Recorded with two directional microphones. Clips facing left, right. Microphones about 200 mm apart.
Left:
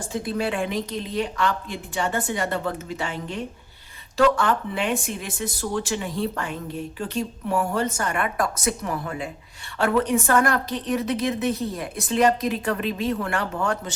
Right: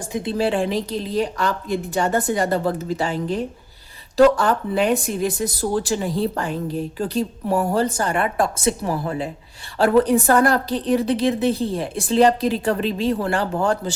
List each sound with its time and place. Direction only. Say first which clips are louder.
0.1 s speech: right 5 dB; 25° right (ahead or behind)